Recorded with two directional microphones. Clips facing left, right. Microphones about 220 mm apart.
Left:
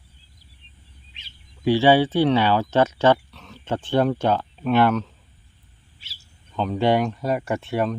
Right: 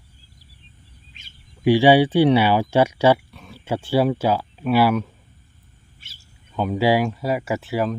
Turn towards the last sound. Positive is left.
turn(degrees=0)  # may be behind; listen again after turning